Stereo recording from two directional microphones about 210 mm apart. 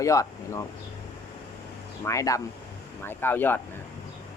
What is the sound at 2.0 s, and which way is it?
Speech, 15° left (ahead or behind).